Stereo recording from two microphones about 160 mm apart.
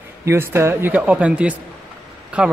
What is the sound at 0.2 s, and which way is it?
Speech, 15° right (ahead or behind).